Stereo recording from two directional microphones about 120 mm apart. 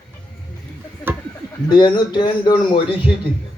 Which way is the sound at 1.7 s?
40° left (ahead or behind).